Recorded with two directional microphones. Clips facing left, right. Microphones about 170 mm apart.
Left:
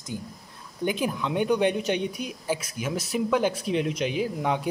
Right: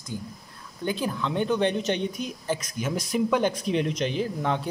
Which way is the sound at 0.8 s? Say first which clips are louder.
Left 1 dB; 15° left (ahead or behind).